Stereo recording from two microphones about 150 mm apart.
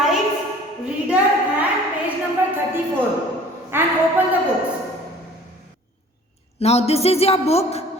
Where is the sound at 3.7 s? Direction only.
15° right (ahead or behind).